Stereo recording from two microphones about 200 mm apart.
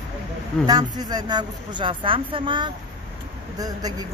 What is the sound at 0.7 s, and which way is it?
Speech, 20° right (ahead or behind).